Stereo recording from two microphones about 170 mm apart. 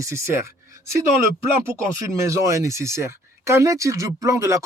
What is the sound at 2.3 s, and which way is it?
Speech, 20° right (ahead or behind).